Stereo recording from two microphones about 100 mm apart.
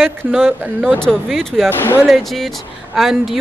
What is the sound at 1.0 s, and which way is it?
Speech, 5° left (ahead or behind).